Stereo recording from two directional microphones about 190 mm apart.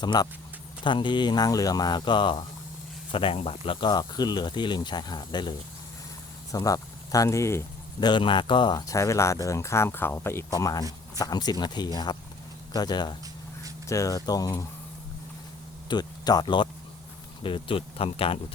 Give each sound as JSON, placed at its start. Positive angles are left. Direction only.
{"t": 0.0, "sound": "speech", "side_deg": 20}
{"t": 15.9, "sound": "speech", "side_deg": 20}